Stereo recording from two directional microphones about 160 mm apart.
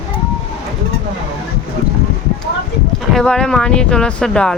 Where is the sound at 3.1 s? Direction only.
5° left (ahead or behind).